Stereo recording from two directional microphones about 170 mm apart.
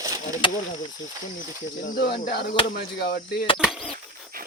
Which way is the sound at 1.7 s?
55° left (ahead or behind).